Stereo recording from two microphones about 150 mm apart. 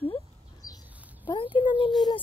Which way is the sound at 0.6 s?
20° left (ahead or behind).